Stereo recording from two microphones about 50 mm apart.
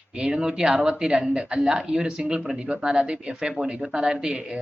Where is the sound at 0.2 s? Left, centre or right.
Centre.